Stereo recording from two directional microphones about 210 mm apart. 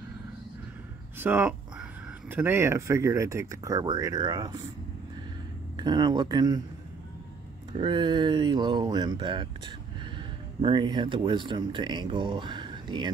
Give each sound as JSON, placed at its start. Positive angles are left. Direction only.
{"t": 1.1, "sound": "speech", "side_deg": -10}
{"t": 5.8, "sound": "speech", "side_deg": -20}
{"t": 7.7, "sound": "speech", "side_deg": -20}